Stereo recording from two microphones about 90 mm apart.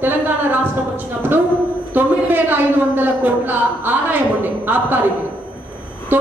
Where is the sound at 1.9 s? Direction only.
20° right (ahead or behind).